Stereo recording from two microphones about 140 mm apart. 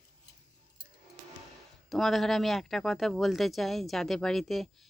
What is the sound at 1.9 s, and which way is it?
Speech, centre (ahead or behind).